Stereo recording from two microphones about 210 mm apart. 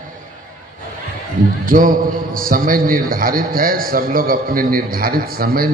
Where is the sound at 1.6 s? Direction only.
40° right (ahead or behind).